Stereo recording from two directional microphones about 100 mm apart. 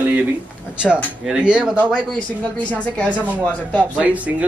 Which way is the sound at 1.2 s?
10° right (ahead or behind).